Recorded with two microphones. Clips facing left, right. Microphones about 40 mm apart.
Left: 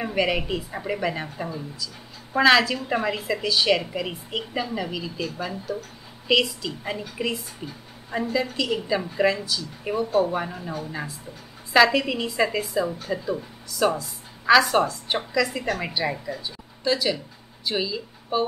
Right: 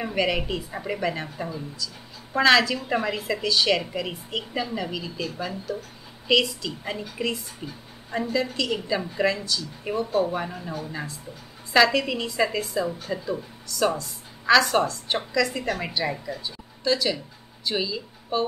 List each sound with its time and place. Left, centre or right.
0.0 s a woman's voice: centre